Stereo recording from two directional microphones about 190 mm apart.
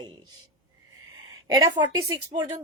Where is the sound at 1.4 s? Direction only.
20° right (ahead or behind).